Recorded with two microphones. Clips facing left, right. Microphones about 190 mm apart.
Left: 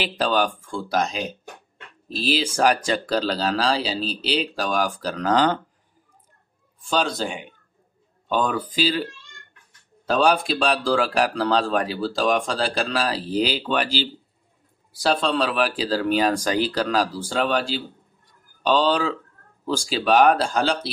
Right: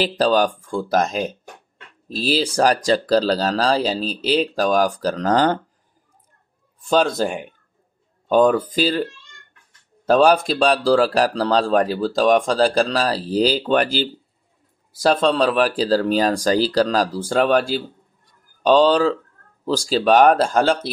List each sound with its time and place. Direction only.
0.0 s speech: 40° right (ahead or behind)
6.9 s speech: 50° right (ahead or behind)
8.3 s speech: 45° right (ahead or behind)